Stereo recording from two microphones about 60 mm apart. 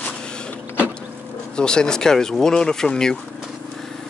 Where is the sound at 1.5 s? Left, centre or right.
Centre.